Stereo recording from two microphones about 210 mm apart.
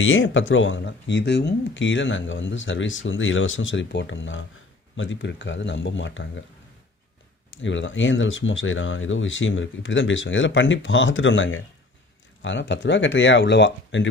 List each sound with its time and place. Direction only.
0.0 s speech: 65° left (ahead or behind)
7.5 s speech: 65° left (ahead or behind)